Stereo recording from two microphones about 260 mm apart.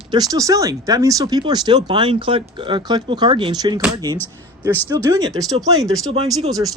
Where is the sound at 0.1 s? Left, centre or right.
Centre.